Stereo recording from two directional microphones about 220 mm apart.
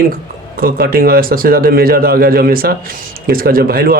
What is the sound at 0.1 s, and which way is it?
Speech, 40° right (ahead or behind).